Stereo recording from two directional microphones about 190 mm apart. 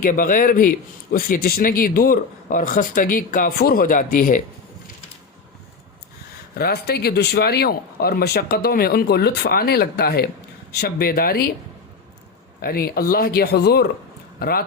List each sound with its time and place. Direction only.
0.0 s speech: 45° left (ahead or behind)
6.6 s speech: 55° left (ahead or behind)
12.6 s speech: 50° left (ahead or behind)